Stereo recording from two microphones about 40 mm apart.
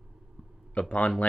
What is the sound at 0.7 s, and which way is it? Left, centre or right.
Speech, left.